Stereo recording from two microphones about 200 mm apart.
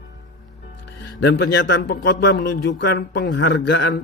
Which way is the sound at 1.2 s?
60° left (ahead or behind).